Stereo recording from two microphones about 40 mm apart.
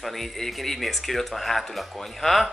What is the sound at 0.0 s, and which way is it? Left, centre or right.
Speech, centre.